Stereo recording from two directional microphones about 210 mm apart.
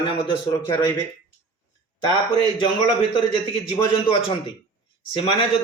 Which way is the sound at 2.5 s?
20° left (ahead or behind).